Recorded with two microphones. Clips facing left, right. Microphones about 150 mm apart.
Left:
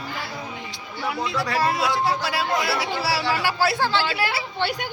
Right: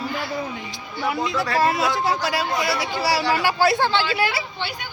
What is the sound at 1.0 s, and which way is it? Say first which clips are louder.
Speech: right 3 dB; centre (ahead or behind).